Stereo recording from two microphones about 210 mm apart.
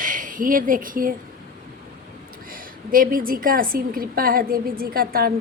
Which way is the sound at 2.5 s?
45° right (ahead or behind).